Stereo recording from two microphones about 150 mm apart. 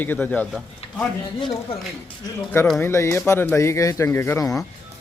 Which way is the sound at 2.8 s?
20° left (ahead or behind).